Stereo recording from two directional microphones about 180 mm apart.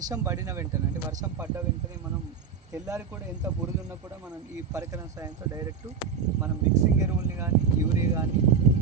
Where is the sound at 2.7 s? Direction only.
15° right (ahead or behind).